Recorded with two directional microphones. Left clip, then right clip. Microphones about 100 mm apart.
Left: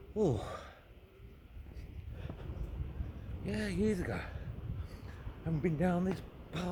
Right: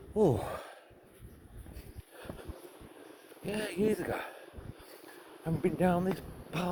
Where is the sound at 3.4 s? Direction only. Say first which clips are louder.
Right 4 dB; 20° left (ahead or behind).